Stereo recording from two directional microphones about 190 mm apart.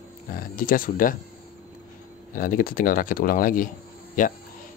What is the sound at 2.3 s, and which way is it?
Speech, 45° left (ahead or behind).